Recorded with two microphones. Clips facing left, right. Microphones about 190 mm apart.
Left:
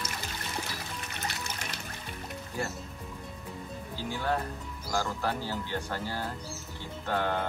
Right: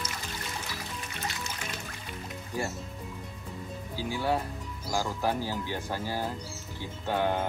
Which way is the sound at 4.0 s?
10° right (ahead or behind).